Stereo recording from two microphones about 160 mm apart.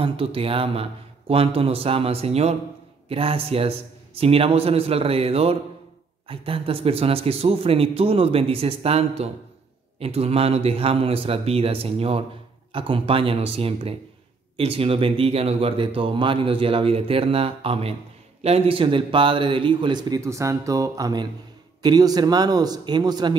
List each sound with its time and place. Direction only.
0.0 s a man's voice: 35° right (ahead or behind)